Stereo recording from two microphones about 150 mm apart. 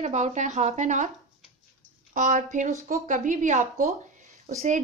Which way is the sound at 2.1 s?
55° right (ahead or behind).